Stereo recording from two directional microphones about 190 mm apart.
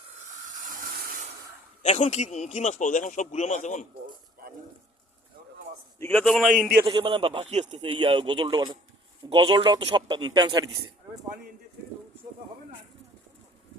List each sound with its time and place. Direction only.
0.7 s a sound: 45° right (ahead or behind)
1.8 s speech: 35° left (ahead or behind)
6.0 s a man's voice: 5° left (ahead or behind)
6.8 s a man's voice: 25° right (ahead or behind)